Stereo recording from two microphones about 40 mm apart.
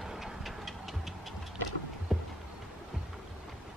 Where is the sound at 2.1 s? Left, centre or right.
Centre.